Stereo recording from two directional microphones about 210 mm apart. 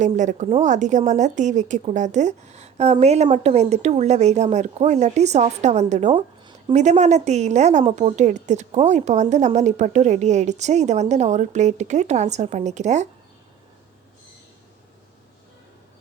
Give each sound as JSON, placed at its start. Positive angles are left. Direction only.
{"t": 0.0, "sound": "a woman's voice", "side_deg": -35}